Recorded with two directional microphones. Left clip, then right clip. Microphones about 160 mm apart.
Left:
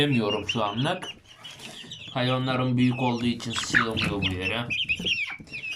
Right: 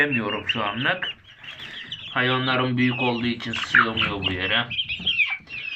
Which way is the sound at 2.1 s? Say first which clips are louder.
Right 5 dB; 15° left (ahead or behind).